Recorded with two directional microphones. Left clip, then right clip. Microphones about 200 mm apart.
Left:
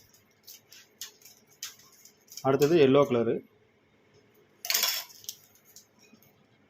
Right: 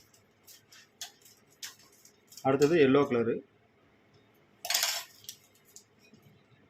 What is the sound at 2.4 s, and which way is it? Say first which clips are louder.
Speech: left 2 dB; 10° left (ahead or behind).